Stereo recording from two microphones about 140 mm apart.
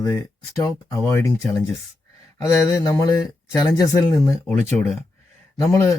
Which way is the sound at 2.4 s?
25° left (ahead or behind).